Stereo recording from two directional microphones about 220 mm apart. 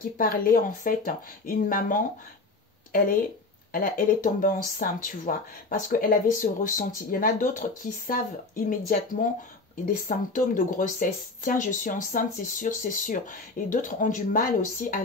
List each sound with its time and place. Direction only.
0.2 s speech: 40° left (ahead or behind)
3.7 s speech: 40° left (ahead or behind)